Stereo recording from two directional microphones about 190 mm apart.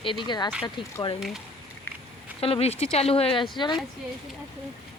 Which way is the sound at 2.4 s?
30° left (ahead or behind).